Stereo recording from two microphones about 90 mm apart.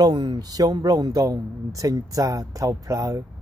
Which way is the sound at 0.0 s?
50° right (ahead or behind).